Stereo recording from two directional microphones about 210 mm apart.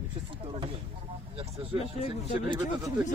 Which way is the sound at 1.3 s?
25° right (ahead or behind).